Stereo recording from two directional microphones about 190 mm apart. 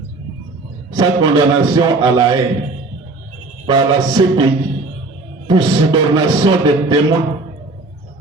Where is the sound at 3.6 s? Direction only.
25° right (ahead or behind).